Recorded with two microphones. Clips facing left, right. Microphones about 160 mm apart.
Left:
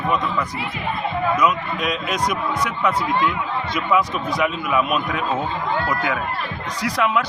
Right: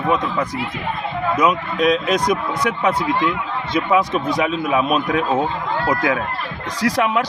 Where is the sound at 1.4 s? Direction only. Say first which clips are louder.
Right 3 dB; 35° right (ahead or behind).